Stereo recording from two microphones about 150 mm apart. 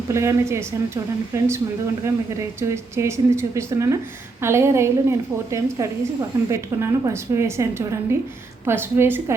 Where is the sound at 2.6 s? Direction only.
20° right (ahead or behind).